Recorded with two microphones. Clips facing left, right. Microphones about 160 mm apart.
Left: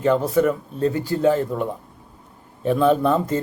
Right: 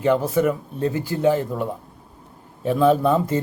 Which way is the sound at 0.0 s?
10° right (ahead or behind).